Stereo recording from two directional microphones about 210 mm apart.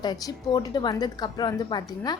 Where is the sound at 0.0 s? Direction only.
20° left (ahead or behind).